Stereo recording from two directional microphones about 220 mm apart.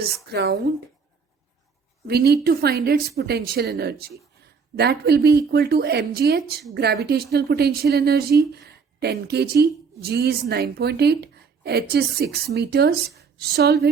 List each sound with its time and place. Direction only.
0.3 s a woman's voice: 45° right (ahead or behind)
2.0 s a woman's voice: 45° right (ahead or behind)